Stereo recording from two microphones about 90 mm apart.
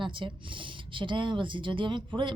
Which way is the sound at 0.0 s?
65° right (ahead or behind).